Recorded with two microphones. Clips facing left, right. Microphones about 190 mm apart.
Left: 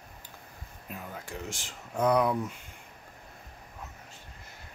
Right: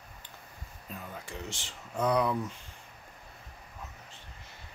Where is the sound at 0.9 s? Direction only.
10° left (ahead or behind).